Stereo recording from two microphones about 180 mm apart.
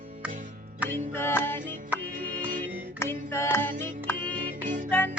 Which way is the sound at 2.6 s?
15° left (ahead or behind).